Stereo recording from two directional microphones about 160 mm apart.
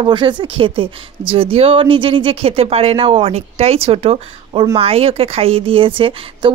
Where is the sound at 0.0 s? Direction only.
30° right (ahead or behind).